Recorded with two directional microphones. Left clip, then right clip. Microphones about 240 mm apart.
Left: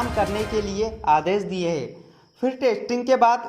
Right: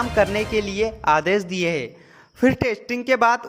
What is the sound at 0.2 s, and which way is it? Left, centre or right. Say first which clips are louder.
A man's voice: right 5 dB; right.